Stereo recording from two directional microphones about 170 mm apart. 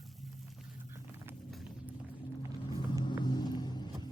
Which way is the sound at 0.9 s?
15° right (ahead or behind).